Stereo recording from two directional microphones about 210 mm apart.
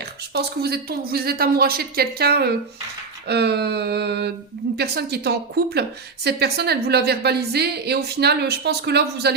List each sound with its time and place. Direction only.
0.0 s a woman's voice: 50° right (ahead or behind)